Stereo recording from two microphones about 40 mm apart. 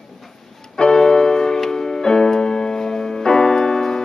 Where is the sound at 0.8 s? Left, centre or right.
Centre.